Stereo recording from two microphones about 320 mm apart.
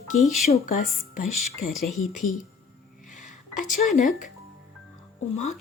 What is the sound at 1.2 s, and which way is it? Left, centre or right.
Speech, left.